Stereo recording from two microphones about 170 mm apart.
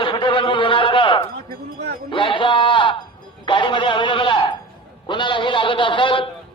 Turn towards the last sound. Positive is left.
turn(degrees=30)  # may be behind; listen again after turning